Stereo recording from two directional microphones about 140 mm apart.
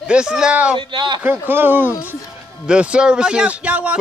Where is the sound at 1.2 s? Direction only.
15° right (ahead or behind).